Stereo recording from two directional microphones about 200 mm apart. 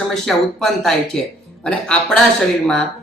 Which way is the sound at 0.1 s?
Centre (ahead or behind).